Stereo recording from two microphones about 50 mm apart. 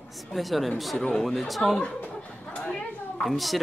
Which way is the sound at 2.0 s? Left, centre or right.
Left.